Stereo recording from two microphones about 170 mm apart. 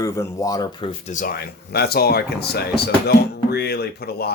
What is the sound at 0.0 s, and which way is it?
Speech, 20° left (ahead or behind).